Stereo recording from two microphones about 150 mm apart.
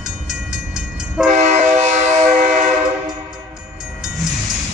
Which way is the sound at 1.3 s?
50° right (ahead or behind).